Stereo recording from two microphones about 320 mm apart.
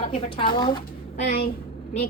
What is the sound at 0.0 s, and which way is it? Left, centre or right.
A woman's voice, centre.